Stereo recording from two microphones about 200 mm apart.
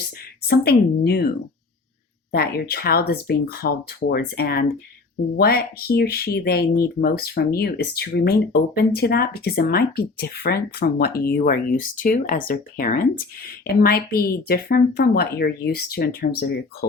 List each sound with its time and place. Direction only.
0.1 s speech: 50° left (ahead or behind)
2.3 s speech: 50° left (ahead or behind)